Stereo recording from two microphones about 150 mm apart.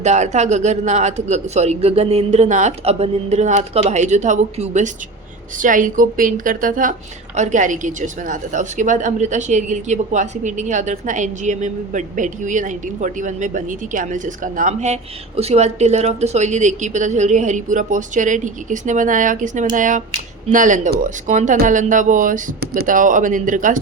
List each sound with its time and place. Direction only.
0.0 s speech: 50° right (ahead or behind)
5.5 s a woman's voice: 60° right (ahead or behind)